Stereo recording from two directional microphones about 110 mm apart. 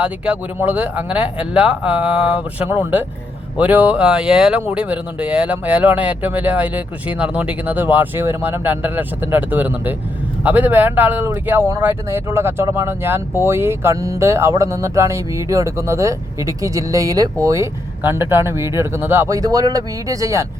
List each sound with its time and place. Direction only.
0.0 s speech: 10° right (ahead or behind); by 20.5 s 30° right (ahead or behind)